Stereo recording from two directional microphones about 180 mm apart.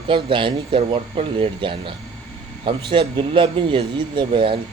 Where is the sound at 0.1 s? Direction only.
30° right (ahead or behind).